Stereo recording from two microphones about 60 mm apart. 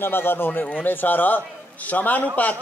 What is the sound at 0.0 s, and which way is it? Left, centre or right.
A man's voice, left.